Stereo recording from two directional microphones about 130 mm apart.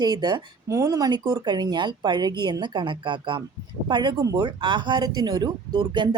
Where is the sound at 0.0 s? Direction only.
35° right (ahead or behind).